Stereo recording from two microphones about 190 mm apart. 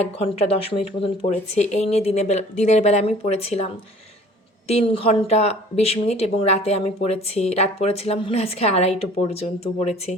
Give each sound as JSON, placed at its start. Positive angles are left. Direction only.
{"t": 0.0, "sound": "speech", "side_deg": 30}
{"t": 4.7, "sound": "speech", "side_deg": 30}